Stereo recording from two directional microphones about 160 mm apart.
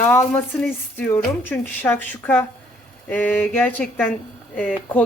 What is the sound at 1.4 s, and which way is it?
Speech, 10° left (ahead or behind).